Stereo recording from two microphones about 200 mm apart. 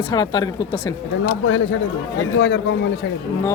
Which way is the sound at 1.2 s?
75° left (ahead or behind).